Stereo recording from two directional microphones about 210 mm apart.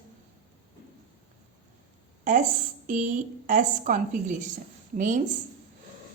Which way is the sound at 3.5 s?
40° right (ahead or behind).